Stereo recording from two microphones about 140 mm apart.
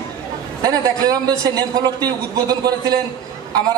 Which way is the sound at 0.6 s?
25° right (ahead or behind).